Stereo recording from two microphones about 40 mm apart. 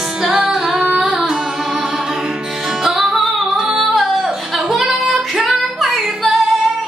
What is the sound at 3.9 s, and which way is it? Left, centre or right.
Singing, centre.